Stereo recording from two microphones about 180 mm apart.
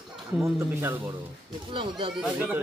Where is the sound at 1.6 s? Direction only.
30° right (ahead or behind).